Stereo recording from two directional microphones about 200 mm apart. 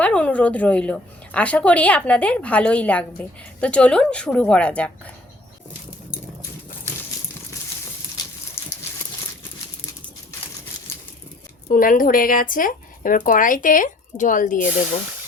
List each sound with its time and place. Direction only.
0.0 s speech: 5° left (ahead or behind)
8.6 s a sound: 10° left (ahead or behind)
11.7 s speech: 45° left (ahead or behind)